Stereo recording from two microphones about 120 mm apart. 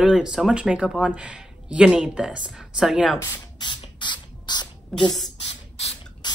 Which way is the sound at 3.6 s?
40° left (ahead or behind).